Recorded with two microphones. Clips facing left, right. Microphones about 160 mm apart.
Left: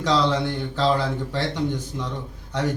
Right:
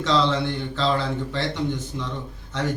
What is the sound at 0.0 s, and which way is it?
Speech, 15° left (ahead or behind).